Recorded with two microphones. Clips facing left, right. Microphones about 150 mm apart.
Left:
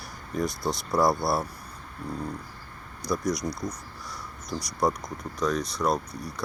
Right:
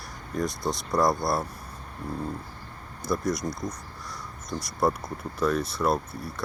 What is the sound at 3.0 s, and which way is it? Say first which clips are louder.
Speech: even; centre (ahead or behind).